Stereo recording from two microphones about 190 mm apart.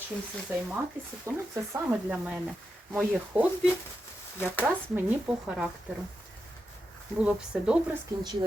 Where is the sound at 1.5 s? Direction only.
10° right (ahead or behind).